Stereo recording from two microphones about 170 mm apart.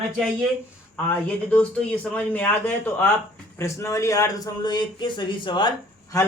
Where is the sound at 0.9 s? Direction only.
10° left (ahead or behind); by 6.2 s 25° left (ahead or behind).